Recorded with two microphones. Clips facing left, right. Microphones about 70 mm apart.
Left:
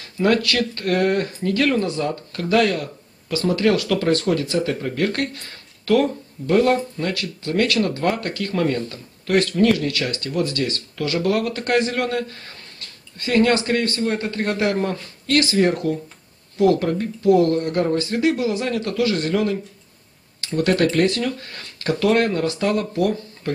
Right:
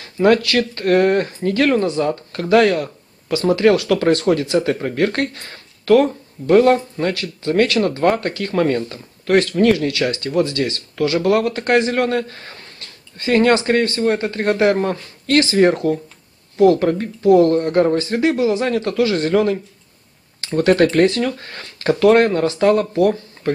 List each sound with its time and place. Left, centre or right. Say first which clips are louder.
0.5 s speech: right 5 dB; right
1.6 s speech: right 4 dB; right
13.8 s speech: right 4 dB; right
16.5 s speech: right 4 dB; right